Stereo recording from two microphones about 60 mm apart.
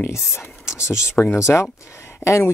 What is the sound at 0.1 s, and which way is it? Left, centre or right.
Speech, left.